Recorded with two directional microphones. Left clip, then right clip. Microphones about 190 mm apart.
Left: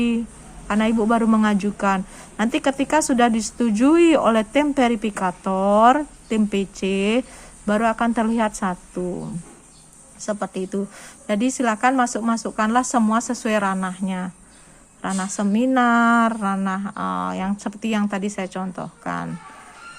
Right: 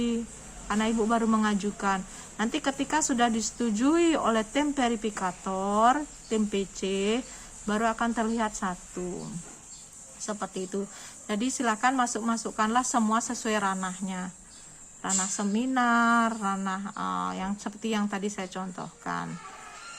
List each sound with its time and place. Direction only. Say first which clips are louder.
0.7 s speech: left 7 dB; 30° left (ahead or behind)
10.2 s speech: left 8 dB; 35° left (ahead or behind)